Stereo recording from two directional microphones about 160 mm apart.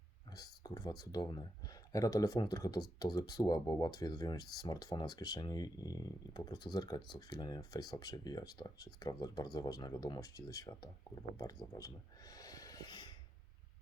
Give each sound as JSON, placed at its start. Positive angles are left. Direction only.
{"t": 0.3, "sound": "speech", "side_deg": 25}